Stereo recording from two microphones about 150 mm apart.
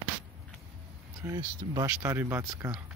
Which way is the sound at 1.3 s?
25° right (ahead or behind).